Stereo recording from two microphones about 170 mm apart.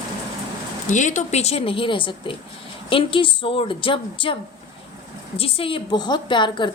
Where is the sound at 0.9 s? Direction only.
45° left (ahead or behind).